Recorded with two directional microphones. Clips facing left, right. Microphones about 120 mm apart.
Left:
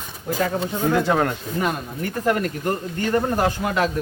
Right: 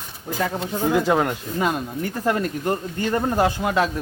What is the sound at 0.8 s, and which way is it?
Speech, 10° right (ahead or behind).